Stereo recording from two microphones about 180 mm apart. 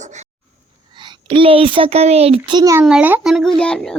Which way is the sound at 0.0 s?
40° right (ahead or behind).